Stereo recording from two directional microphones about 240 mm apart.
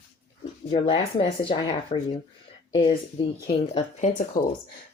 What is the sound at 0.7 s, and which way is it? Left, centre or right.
Speech, left.